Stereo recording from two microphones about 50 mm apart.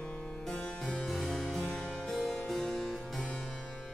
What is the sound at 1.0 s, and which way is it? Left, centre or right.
Harpsichord, centre.